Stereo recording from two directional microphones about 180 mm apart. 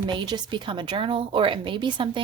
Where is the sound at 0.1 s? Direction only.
25° right (ahead or behind).